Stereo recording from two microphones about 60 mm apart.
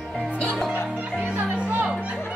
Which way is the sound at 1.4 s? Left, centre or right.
Right.